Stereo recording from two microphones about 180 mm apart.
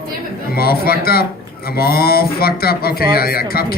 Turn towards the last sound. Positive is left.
turn(degrees=55)  # may be behind; listen again after turning